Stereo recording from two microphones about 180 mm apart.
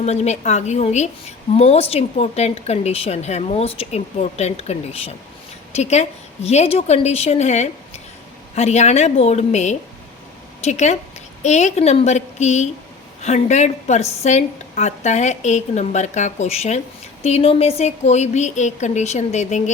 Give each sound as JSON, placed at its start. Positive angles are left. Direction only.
{"t": 0.0, "sound": "a woman's voice", "side_deg": 35}